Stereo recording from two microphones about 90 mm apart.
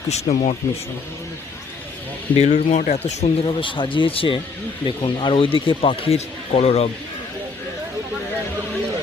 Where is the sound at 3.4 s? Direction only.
65° left (ahead or behind); by 4.4 s 80° left.